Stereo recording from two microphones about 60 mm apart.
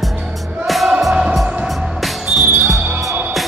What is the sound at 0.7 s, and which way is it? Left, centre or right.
Music, centre.